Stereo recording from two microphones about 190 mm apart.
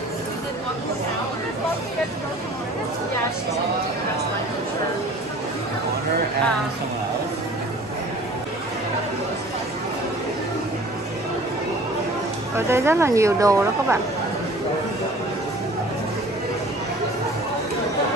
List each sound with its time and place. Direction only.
12.5 s speech: 15° right (ahead or behind)